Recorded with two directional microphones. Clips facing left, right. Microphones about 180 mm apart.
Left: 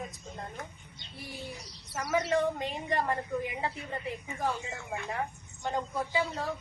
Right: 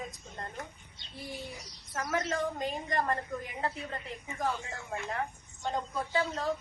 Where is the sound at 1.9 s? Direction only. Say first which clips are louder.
Left 4 dB; 5° left (ahead or behind).